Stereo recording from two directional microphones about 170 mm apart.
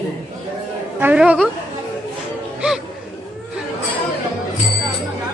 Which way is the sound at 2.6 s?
5° right (ahead or behind).